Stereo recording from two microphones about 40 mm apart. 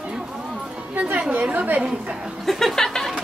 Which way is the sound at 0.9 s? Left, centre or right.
Right.